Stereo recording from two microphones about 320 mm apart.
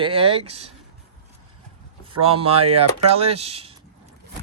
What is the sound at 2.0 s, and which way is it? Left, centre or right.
Speech, centre.